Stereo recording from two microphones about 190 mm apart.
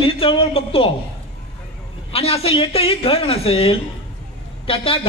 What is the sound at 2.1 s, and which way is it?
A man's voice, 30° left (ahead or behind).